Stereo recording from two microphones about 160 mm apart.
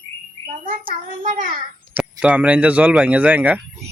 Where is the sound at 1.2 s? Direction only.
55° right (ahead or behind).